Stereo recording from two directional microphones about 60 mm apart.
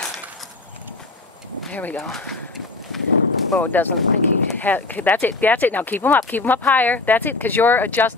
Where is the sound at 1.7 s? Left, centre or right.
Left.